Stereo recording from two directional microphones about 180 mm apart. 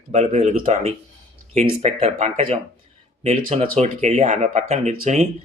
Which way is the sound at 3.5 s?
40° right (ahead or behind).